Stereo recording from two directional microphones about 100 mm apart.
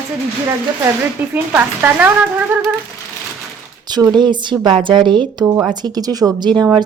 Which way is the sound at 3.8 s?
45° right (ahead or behind).